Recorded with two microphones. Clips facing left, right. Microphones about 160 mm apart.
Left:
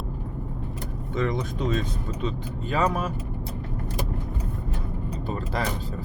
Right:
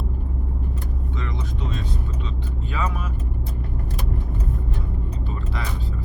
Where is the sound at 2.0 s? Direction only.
40° left (ahead or behind).